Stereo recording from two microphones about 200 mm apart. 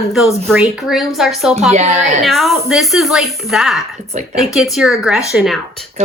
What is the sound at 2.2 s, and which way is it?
Speech, centre (ahead or behind).